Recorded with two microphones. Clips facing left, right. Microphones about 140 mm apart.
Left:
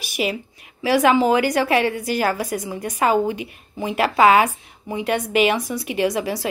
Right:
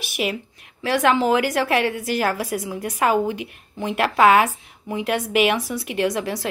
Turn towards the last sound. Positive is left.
turn(degrees=0)  # may be behind; listen again after turning